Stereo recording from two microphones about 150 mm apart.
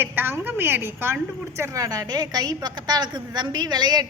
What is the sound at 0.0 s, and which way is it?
A woman's voice, 15° right (ahead or behind).